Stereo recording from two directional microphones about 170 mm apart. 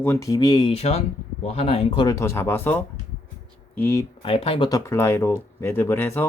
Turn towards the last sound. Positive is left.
turn(degrees=15)  # may be behind; listen again after turning